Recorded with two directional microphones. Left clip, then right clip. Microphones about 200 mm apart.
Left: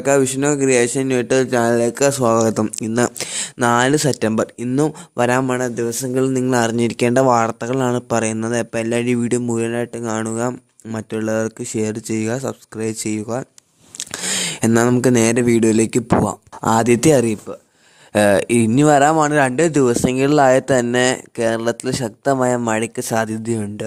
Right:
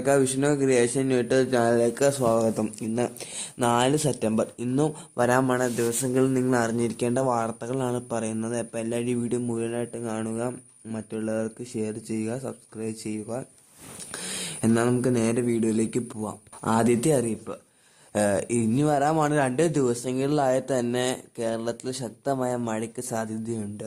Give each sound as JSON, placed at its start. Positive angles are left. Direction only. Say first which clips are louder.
{"t": 0.0, "sound": "speech", "louder": "left 6 dB", "side_deg": 35}